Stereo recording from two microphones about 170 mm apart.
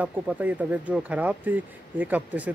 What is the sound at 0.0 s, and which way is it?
Speech, 10° right (ahead or behind).